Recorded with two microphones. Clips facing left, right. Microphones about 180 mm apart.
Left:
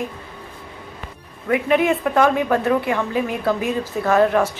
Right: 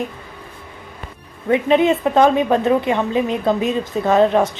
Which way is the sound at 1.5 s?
25° right (ahead or behind).